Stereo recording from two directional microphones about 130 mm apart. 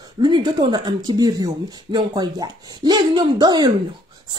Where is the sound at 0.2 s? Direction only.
35° right (ahead or behind).